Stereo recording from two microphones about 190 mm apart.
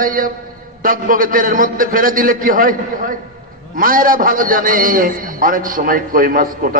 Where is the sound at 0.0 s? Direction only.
45° right (ahead or behind).